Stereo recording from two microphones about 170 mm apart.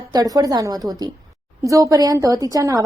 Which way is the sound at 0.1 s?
20° right (ahead or behind).